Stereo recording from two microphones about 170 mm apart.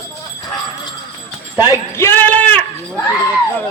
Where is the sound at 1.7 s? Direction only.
15° left (ahead or behind).